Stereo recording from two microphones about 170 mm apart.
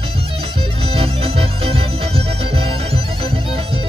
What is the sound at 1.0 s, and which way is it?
Music, 35° right (ahead or behind).